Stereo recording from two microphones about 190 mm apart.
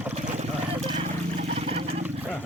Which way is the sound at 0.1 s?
35° right (ahead or behind).